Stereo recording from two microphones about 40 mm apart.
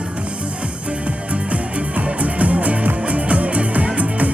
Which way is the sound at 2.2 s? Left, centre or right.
Right.